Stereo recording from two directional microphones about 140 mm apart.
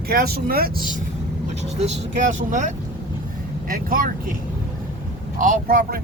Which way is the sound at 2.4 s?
65° right (ahead or behind).